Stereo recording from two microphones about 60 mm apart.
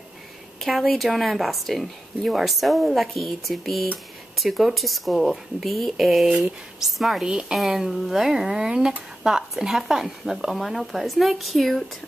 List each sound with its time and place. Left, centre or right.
0.6 s a woman's voice: centre